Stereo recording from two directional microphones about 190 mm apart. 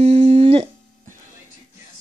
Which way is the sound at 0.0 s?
35° right (ahead or behind).